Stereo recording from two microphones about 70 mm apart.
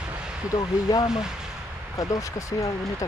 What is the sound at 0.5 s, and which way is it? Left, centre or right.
Speech, left.